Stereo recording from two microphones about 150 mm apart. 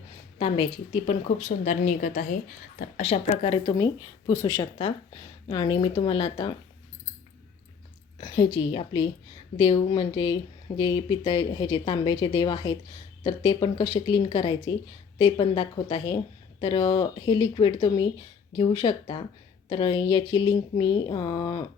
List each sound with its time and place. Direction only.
0.3 s a woman's voice: 40° left (ahead or behind)
1.5 s a woman's voice: 55° left (ahead or behind)
3.0 s speech: 40° left (ahead or behind)
4.3 s speech: 20° left (ahead or behind)
5.5 s speech: 30° left (ahead or behind)
8.2 s speech: 35° left (ahead or behind)